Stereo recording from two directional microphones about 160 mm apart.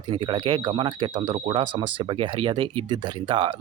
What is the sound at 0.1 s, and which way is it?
Speech, 30° right (ahead or behind).